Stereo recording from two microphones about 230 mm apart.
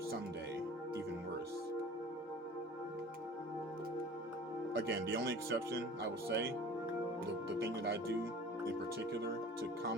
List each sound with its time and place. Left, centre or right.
4.9 s speech: right
7.6 s speech: right